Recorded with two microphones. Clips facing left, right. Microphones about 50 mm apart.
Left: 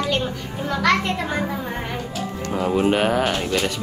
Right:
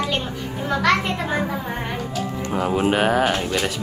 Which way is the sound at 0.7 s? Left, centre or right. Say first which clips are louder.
Even; centre.